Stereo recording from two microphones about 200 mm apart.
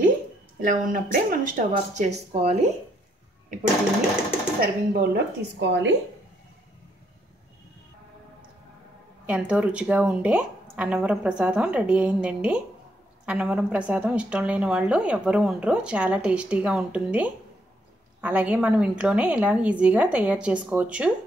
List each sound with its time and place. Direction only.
0.6 s speech: 40° right (ahead or behind)
4.6 s speech: 50° right (ahead or behind)
9.2 s a woman's voice: 5° right (ahead or behind)